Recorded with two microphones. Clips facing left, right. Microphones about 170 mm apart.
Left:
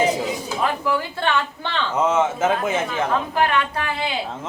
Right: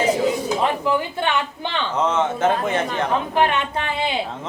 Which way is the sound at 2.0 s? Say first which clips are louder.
Left 1 dB; 5° left (ahead or behind).